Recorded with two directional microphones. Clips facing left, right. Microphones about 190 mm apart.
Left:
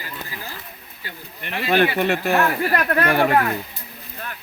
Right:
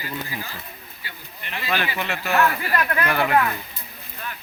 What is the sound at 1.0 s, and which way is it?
Speech, 55° left (ahead or behind).